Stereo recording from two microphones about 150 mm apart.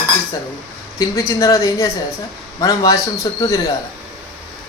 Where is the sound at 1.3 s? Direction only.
20° left (ahead or behind).